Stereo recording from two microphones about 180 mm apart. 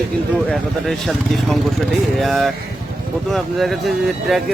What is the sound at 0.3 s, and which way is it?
Speech, centre (ahead or behind).